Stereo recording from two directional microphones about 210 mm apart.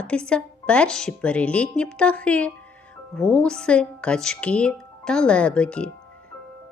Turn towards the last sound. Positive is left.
turn(degrees=5)  # may be behind; listen again after turning